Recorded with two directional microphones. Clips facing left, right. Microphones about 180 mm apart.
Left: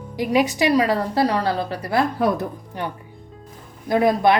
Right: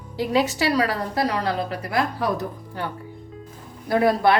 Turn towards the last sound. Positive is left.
turn(degrees=20)  # may be behind; listen again after turning